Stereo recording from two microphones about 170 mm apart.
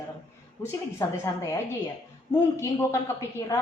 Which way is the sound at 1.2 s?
20° left (ahead or behind).